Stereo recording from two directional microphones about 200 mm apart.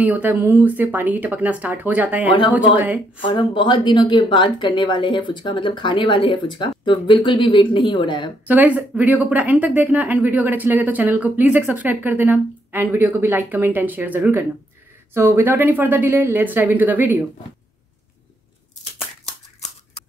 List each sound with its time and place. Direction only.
0.0 s a woman's voice: 10° right (ahead or behind)
3.3 s speech: 25° left (ahead or behind)
8.5 s a woman's voice: 10° right (ahead or behind)